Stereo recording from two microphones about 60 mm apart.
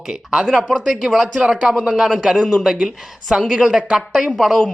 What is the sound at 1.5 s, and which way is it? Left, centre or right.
Speech, centre.